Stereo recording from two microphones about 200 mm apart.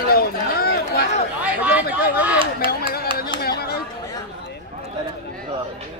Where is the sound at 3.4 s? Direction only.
50° left (ahead or behind).